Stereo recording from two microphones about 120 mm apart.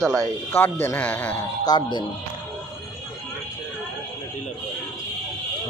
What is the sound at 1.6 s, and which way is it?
Speech, 35° left (ahead or behind).